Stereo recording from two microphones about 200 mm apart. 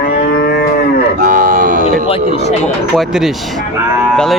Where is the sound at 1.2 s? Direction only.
40° right (ahead or behind).